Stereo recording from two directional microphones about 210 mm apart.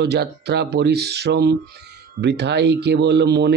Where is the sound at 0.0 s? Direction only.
50° right (ahead or behind).